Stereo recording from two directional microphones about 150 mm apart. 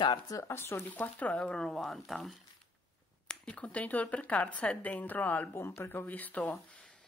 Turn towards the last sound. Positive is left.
turn(degrees=10)  # may be behind; listen again after turning